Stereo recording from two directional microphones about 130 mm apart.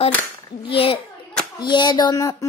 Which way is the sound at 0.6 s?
45° left (ahead or behind).